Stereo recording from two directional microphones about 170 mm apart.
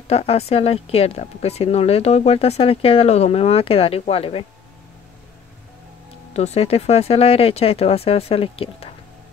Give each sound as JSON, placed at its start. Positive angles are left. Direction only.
{"t": 0.1, "sound": "speech", "side_deg": 35}
{"t": 6.3, "sound": "speech", "side_deg": 40}